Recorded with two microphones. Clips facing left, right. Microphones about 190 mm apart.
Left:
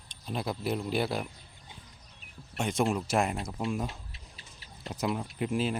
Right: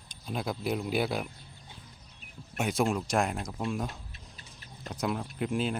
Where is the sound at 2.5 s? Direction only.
Centre (ahead or behind).